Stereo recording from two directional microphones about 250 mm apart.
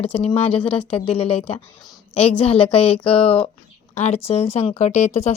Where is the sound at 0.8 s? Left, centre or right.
Centre.